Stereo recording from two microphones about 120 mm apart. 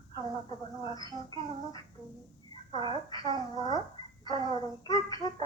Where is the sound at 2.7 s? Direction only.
40° right (ahead or behind).